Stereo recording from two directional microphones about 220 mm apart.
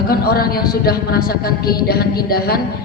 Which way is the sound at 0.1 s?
45° left (ahead or behind).